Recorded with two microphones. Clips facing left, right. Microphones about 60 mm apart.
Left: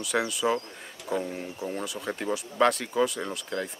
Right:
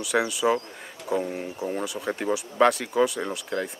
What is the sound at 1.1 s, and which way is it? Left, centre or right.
Speech, centre.